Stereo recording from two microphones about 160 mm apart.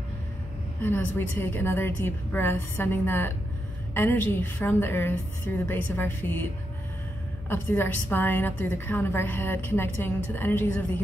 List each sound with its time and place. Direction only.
0.8 s a woman's voice: 15° left (ahead or behind)